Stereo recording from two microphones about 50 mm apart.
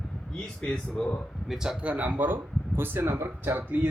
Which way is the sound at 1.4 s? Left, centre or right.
Centre.